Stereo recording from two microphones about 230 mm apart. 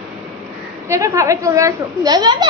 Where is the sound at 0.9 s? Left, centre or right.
Centre.